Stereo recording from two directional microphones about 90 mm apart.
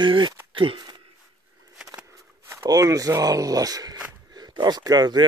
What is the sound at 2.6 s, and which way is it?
Speech, 40° right (ahead or behind).